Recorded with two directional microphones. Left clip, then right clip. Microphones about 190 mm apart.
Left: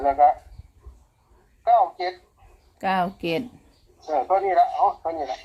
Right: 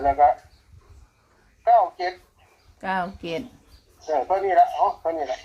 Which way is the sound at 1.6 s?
5° right (ahead or behind).